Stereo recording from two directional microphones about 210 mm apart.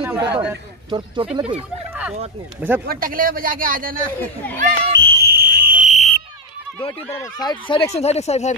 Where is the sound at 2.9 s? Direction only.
40° right (ahead or behind).